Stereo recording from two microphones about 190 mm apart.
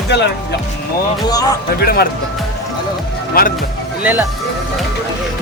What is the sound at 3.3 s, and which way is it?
Speech, 50° left (ahead or behind).